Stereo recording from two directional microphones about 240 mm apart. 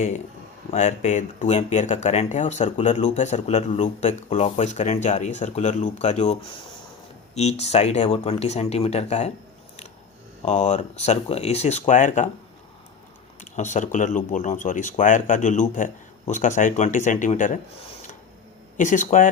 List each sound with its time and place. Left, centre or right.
0.7 s speech: left
10.4 s speech: left
13.4 s speech: left